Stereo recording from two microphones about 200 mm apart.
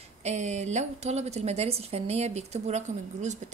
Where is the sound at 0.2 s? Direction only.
35° right (ahead or behind).